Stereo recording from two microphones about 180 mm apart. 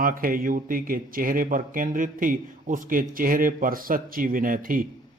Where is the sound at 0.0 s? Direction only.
50° right (ahead or behind).